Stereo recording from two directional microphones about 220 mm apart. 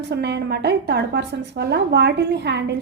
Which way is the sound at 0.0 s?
50° right (ahead or behind).